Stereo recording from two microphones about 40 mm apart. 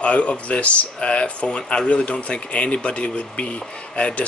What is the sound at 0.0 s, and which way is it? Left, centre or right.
Speech, left.